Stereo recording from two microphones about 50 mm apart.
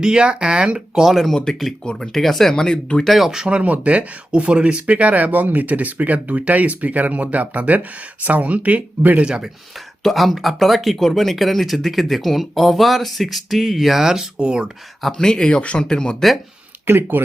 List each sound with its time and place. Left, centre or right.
0.0 s speech: centre
1.0 s speech: centre
3.1 s speech: centre
3.3 s speech: centre
3.6 s speech: right
9.2 s speech: centre
9.7 s speech: centre
15.2 s speech: centre
16.8 s speech: right